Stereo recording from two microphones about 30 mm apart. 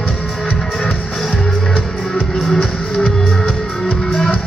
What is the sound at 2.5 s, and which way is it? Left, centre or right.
Music, left.